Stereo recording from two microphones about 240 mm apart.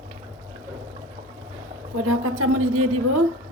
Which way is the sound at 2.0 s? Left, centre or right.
Right.